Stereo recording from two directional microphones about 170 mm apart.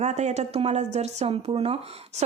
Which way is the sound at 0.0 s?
40° right (ahead or behind).